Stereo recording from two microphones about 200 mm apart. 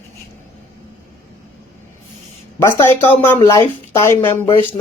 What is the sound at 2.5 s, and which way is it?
Speech, 15° left (ahead or behind).